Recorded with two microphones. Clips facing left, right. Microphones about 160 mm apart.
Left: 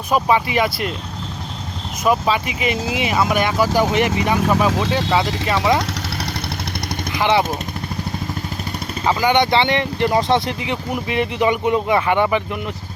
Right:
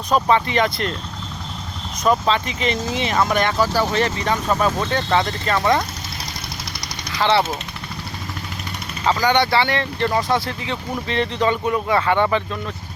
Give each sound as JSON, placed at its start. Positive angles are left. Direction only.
{"t": 0.1, "sound": "speech", "side_deg": 10}
{"t": 2.0, "sound": "speech", "side_deg": 10}
{"t": 7.1, "sound": "speech", "side_deg": 15}
{"t": 9.0, "sound": "speech", "side_deg": 15}